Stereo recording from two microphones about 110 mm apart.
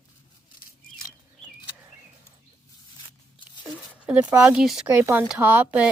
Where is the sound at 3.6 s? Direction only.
10° right (ahead or behind).